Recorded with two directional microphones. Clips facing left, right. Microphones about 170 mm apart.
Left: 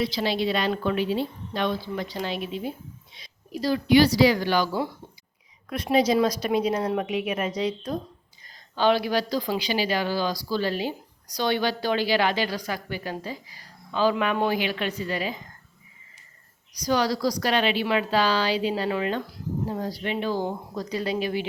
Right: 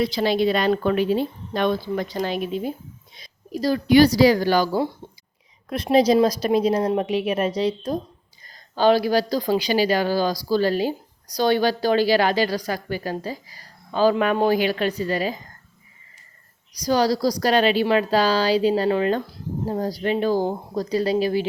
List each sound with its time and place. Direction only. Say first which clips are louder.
0.0 s speech: right 5 dB; 45° right (ahead or behind)
16.8 s speech: right 4 dB; 35° right (ahead or behind)